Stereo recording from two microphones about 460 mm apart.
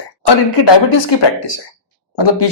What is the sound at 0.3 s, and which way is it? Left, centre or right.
Speech, left.